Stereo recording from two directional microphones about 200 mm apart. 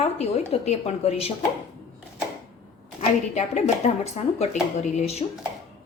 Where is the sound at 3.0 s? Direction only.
35° left (ahead or behind).